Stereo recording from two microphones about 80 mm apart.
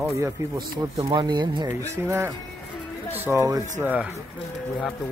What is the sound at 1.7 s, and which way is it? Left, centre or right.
Speech, right.